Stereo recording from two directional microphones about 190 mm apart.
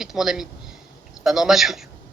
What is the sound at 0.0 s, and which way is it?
A man's voice, centre (ahead or behind).